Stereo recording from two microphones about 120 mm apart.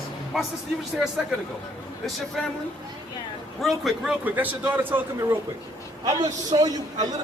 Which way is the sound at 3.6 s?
Centre (ahead or behind).